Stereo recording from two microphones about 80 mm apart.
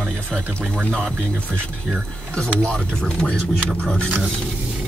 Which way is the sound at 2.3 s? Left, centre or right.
Centre.